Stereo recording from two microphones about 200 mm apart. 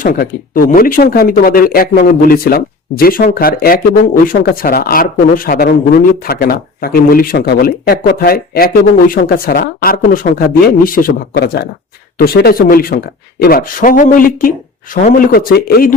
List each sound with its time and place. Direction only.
0.0 s speech: 45° left (ahead or behind)